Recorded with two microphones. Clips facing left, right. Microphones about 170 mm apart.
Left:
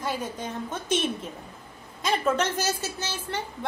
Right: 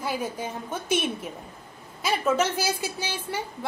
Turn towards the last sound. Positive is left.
turn(degrees=-10)  # may be behind; listen again after turning